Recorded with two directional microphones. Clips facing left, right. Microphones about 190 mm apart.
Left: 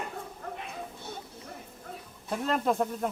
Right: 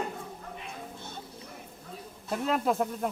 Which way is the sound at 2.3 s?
5° right (ahead or behind).